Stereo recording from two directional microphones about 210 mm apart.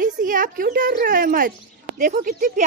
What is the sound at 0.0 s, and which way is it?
Speech, 40° right (ahead or behind).